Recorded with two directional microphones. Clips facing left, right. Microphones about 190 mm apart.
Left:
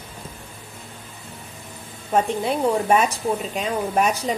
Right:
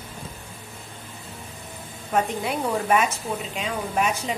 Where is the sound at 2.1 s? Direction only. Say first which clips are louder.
Left 3 dB; 30° left (ahead or behind).